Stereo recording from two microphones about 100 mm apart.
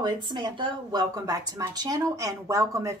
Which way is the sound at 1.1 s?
40° right (ahead or behind).